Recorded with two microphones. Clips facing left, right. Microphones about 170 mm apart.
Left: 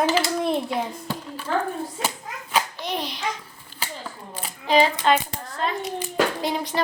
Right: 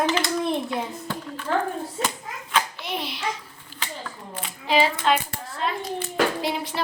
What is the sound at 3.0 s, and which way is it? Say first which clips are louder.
Speech: left 2 dB; 40° left (ahead or behind).